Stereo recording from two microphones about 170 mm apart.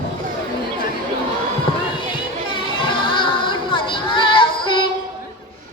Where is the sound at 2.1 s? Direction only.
30° left (ahead or behind).